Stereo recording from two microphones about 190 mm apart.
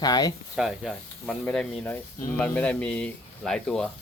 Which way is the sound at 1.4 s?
5° left (ahead or behind).